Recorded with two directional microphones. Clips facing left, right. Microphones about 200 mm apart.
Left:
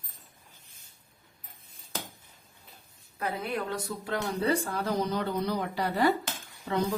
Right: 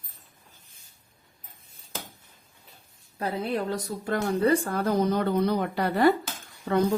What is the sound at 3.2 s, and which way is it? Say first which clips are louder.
Speech: right 4 dB; 30° right (ahead or behind).